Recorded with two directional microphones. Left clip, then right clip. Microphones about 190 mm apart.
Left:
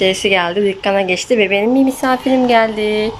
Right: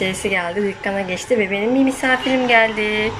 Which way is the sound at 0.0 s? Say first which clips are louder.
Left 7 dB; 10° left (ahead or behind).